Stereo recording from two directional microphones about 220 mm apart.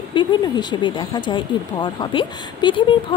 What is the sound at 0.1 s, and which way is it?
A woman's voice, 20° left (ahead or behind).